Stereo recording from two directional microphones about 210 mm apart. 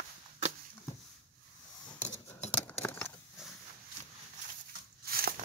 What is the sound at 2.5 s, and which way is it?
Keys jangling, 5° left (ahead or behind).